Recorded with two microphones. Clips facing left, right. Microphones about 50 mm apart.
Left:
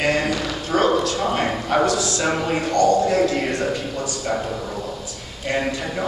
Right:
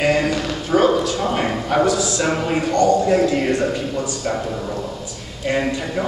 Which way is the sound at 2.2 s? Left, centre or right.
Centre.